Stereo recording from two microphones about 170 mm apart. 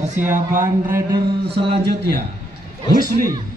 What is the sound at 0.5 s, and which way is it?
Speech, 50° right (ahead or behind).